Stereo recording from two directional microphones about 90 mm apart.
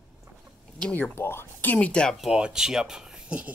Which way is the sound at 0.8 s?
20° left (ahead or behind).